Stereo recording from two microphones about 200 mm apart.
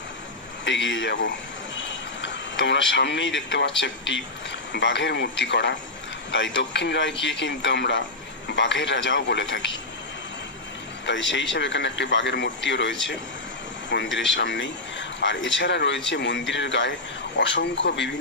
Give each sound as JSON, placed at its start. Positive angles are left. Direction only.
{"t": 0.7, "sound": "speech", "side_deg": 65}
{"t": 11.1, "sound": "speech", "side_deg": 65}